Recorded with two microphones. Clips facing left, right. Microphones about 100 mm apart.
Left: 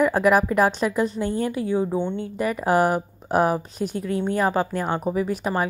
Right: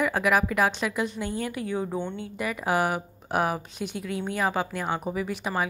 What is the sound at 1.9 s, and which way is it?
Speech, 15° left (ahead or behind).